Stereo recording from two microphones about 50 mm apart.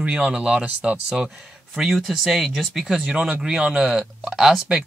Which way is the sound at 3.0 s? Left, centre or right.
Centre.